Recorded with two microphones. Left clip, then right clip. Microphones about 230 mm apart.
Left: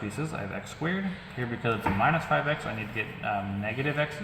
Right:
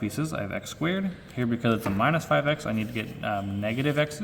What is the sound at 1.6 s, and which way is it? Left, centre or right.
Speech, right.